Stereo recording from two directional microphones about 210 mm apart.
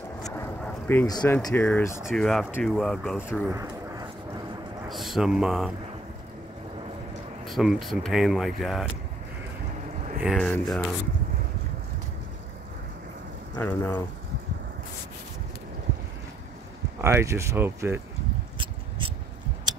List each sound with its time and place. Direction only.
0.3 s a sound: 10° left (ahead or behind)
1.4 s speech: 10° left (ahead or behind)
2.0 s speech: centre (ahead or behind)
3.4 s a sound: 15° right (ahead or behind)
4.8 s speech: centre (ahead or behind)
7.4 s speech: centre (ahead or behind)
10.2 s speech: centre (ahead or behind)
13.6 s speech: 10° left (ahead or behind)
17.0 s speech: 15° right (ahead or behind)
18.6 s a sound: 25° right (ahead or behind)